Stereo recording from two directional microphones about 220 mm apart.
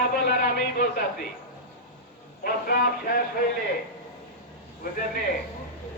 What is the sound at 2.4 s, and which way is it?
Speech, 40° left (ahead or behind).